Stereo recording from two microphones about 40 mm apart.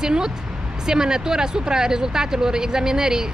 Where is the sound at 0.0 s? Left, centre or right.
Centre.